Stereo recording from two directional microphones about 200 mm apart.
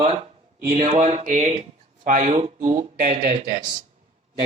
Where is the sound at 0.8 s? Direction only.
35° right (ahead or behind).